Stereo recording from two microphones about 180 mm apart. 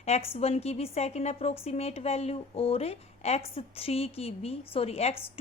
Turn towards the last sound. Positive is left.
turn(degrees=35)  # may be behind; listen again after turning